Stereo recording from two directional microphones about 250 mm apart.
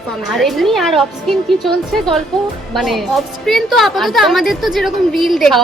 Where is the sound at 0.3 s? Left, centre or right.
Centre.